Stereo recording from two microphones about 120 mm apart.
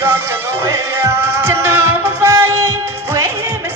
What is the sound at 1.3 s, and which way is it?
Music, 20° right (ahead or behind).